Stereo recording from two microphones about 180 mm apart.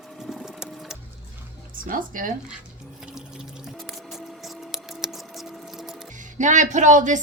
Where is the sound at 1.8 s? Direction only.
50° right (ahead or behind).